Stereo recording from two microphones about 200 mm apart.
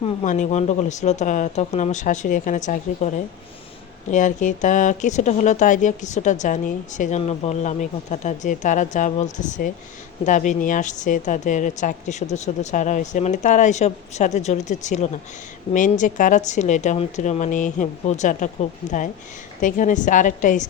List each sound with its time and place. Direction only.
0.0 s speech: 35° left (ahead or behind)